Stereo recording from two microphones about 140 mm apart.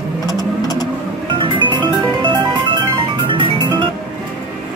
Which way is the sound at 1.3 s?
35° right (ahead or behind).